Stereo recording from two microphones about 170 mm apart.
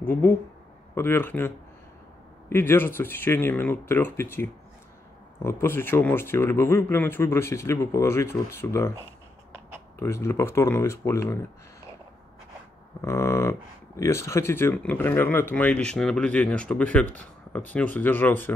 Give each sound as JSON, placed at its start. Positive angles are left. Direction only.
{"t": 0.0, "sound": "speech", "side_deg": 15}
{"t": 2.5, "sound": "speech", "side_deg": 15}
{"t": 9.9, "sound": "speech", "side_deg": 15}
{"t": 13.0, "sound": "speech", "side_deg": 15}